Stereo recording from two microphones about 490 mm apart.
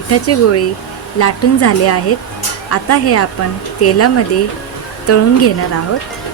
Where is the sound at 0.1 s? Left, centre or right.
Left.